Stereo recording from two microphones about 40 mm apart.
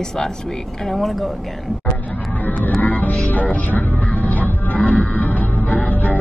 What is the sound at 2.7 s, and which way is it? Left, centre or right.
Music, left.